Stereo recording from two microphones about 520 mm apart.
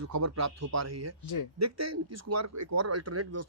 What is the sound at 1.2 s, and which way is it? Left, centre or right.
Speech, left.